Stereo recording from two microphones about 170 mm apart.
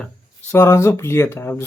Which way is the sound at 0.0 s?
10° left (ahead or behind).